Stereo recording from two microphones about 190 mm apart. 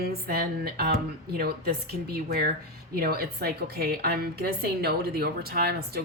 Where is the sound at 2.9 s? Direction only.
55° right (ahead or behind).